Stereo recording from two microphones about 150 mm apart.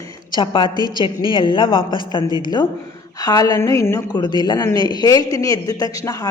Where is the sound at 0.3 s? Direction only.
30° left (ahead or behind).